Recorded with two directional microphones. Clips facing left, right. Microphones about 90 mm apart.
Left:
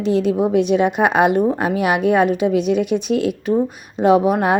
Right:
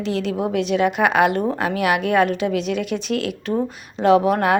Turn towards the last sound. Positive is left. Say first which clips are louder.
# left 1 dB
turn(degrees=20)  # may be behind; listen again after turning